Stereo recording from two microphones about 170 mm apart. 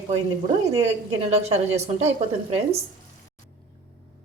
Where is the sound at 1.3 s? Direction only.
40° right (ahead or behind).